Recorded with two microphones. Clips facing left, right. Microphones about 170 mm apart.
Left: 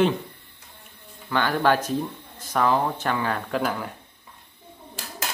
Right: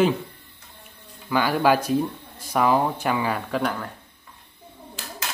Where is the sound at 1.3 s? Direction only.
10° right (ahead or behind).